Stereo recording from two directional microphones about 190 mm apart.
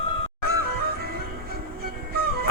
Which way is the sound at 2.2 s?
55° right (ahead or behind).